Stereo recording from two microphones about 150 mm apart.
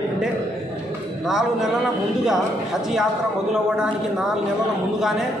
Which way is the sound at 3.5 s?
5° right (ahead or behind).